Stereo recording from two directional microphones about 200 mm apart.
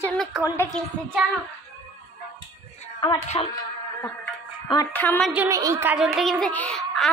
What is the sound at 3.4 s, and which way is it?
Speech, 25° left (ahead or behind).